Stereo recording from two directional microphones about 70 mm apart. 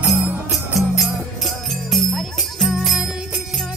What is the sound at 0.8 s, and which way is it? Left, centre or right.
Music, centre.